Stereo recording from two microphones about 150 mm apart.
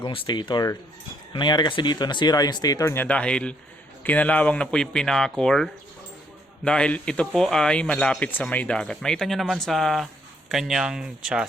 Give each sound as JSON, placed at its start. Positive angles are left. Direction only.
{"t": 0.0, "sound": "speech", "side_deg": 30}